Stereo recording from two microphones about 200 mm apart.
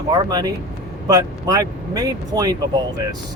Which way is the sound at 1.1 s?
20° right (ahead or behind).